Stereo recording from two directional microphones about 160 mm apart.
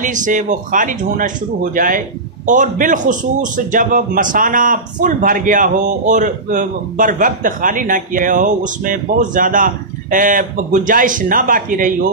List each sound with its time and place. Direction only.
0.0 s speech: 50° right (ahead or behind)